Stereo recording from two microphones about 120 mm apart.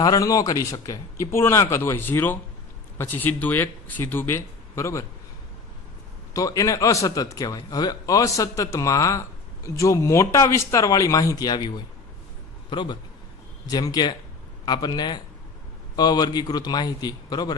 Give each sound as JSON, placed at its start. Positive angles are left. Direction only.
{"t": 0.0, "sound": "a man's voice", "side_deg": 30}
{"t": 6.3, "sound": "a man's voice", "side_deg": 30}
{"t": 12.7, "sound": "a man's voice", "side_deg": 40}